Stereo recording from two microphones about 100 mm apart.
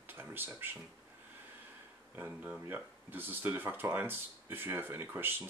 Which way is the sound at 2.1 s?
20° right (ahead or behind).